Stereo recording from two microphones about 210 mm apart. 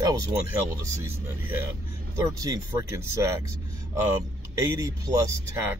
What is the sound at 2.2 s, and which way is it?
Speech, 15° right (ahead or behind).